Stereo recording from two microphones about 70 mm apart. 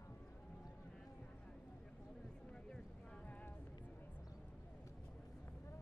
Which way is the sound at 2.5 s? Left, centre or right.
Centre.